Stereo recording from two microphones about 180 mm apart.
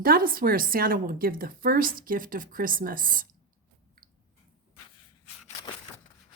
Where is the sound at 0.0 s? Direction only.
55° right (ahead or behind).